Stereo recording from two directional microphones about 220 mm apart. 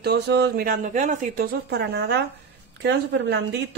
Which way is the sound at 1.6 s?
50° right (ahead or behind).